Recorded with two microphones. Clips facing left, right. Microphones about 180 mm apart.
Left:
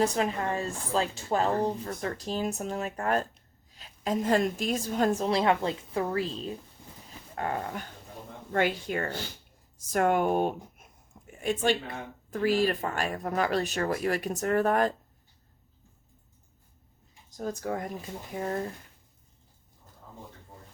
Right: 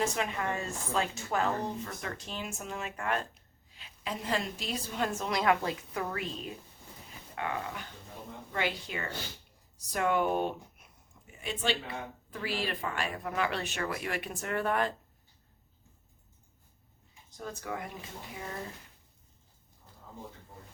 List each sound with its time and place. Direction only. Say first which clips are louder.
0.0 s a woman's voice: left 5 dB; 35° left (ahead or behind)
7.3 s speech: left 4 dB; 40° left (ahead or behind)
9.7 s a sound: left 4 dB; 50° left (ahead or behind)
12.3 s a woman's voice: left 10 dB; 45° left (ahead or behind)
17.3 s a woman's voice: left 6 dB; 40° left (ahead or behind)